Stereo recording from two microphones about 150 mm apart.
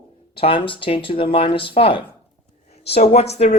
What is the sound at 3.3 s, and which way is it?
Speech, 45° left (ahead or behind).